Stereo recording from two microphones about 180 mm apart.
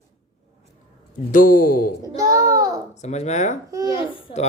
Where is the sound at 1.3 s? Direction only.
50° left (ahead or behind).